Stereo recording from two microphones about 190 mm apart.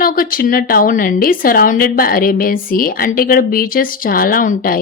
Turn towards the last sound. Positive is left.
turn(degrees=45)  # may be behind; listen again after turning